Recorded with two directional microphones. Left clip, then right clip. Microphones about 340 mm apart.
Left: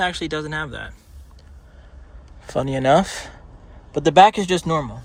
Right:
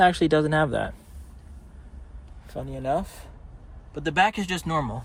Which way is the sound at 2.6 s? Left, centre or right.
Left.